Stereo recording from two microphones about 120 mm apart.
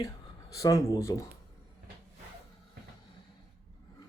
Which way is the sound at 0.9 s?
25° left (ahead or behind).